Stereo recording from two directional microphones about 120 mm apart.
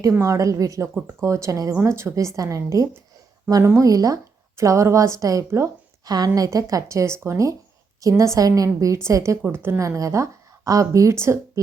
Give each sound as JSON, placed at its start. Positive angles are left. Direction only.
{"t": 0.0, "sound": "a woman's voice", "side_deg": -25}